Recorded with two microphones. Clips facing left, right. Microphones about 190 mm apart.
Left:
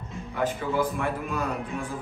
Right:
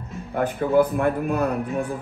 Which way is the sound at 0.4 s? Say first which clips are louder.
Right 7 dB; 60° right (ahead or behind).